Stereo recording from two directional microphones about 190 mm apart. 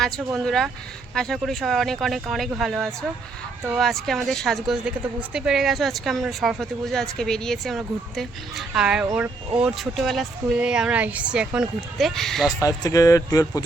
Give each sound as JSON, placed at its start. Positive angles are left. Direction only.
{"t": 0.3, "sound": "a woman's voice", "side_deg": 0}
{"t": 12.5, "sound": "speech", "side_deg": 20}